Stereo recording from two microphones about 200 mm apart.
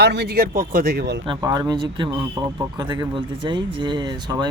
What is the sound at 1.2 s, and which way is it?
Speech, 20° right (ahead or behind).